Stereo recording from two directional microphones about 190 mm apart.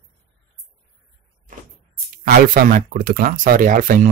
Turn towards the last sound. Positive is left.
turn(degrees=-45)  # may be behind; listen again after turning